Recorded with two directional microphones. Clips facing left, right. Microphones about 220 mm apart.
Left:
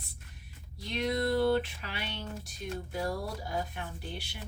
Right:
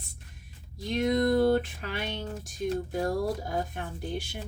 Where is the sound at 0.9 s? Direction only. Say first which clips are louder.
Right 5 dB; 45° right (ahead or behind).